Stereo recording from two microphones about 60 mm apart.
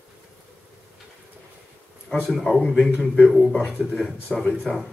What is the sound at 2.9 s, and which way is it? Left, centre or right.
Speech, left.